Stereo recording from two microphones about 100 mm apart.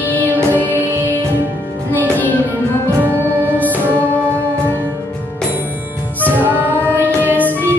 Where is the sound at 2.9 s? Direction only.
25° right (ahead or behind).